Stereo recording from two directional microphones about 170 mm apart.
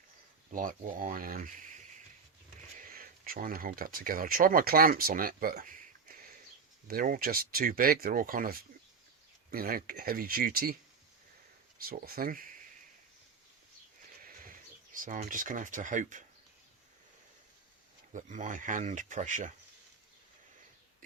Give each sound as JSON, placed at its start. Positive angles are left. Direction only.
{"t": 0.5, "sound": "speech", "side_deg": -50}
{"t": 11.8, "sound": "speech", "side_deg": -60}
{"t": 14.3, "sound": "horse", "side_deg": -55}
{"t": 14.9, "sound": "speech", "side_deg": -50}
{"t": 18.1, "sound": "speech", "side_deg": -45}